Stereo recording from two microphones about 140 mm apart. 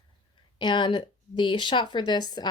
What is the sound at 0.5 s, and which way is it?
Speech, 35° left (ahead or behind).